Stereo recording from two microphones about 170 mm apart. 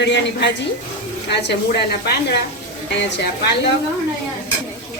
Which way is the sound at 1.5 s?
80° left.